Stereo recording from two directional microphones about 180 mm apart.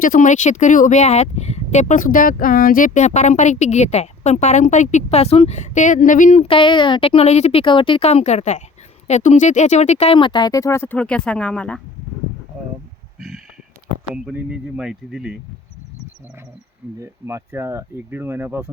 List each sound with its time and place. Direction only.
0.0 s speech: 45° left (ahead or behind); by 11.8 s 5° left (ahead or behind)
13.1 s a sound: centre (ahead or behind)
14.1 s speech: 5° right (ahead or behind)
17.0 s speech: 15° right (ahead or behind)